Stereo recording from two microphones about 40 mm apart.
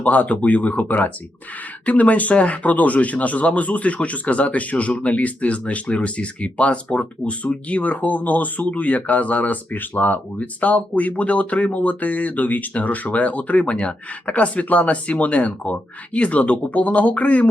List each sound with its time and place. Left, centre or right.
0.0 s speech: left